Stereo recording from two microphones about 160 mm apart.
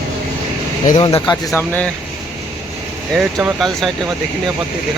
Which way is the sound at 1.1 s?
20° left (ahead or behind).